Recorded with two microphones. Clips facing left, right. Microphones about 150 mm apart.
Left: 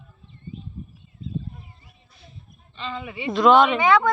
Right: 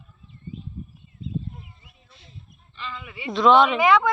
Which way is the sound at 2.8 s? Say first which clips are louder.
Left 5 dB; 30° left (ahead or behind).